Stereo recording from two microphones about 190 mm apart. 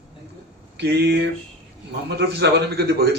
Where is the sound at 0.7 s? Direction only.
60° right (ahead or behind).